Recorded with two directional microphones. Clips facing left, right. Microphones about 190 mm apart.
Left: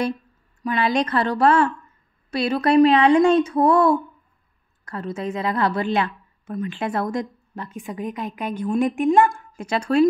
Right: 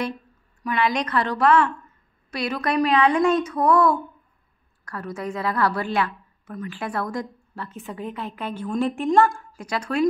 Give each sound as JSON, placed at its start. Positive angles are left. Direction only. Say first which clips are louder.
{"t": 0.7, "sound": "a woman's voice", "louder": "left 3 dB", "side_deg": 30}